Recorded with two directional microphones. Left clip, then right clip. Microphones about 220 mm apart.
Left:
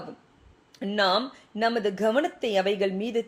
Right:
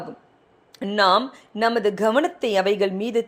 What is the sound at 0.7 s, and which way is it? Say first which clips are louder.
Speech: right 6 dB; 20° right (ahead or behind).